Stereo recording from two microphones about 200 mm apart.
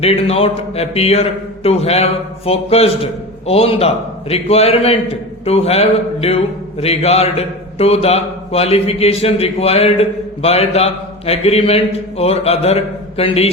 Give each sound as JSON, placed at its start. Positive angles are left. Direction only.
{"t": 0.0, "sound": "a man's voice", "side_deg": 30}